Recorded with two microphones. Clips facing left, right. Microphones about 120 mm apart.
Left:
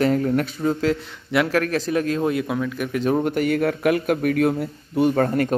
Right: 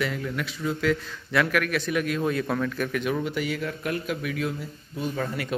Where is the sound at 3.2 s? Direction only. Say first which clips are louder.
Left 8 dB; 50° left (ahead or behind).